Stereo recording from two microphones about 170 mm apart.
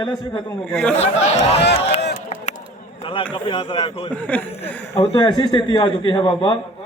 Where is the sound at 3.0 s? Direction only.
30° left (ahead or behind).